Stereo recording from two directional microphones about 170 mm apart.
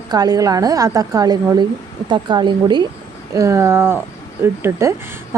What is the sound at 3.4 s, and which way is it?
A woman's voice, 15° right (ahead or behind).